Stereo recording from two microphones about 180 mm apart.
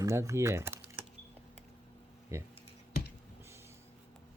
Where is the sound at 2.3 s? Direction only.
15° right (ahead or behind).